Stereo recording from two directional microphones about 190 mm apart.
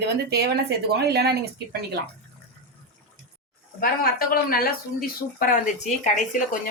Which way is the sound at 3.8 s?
50° left (ahead or behind).